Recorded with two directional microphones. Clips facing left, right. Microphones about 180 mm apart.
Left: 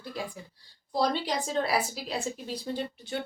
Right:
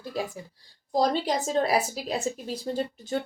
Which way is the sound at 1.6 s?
45° right (ahead or behind).